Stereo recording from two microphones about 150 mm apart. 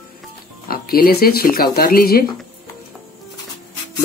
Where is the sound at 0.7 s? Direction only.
80° left.